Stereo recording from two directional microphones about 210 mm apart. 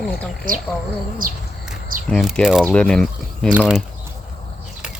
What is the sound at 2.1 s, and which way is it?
Speech, centre (ahead or behind).